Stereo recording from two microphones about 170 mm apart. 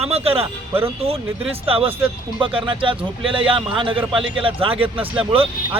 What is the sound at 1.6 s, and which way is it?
A man's voice, 35° right (ahead or behind).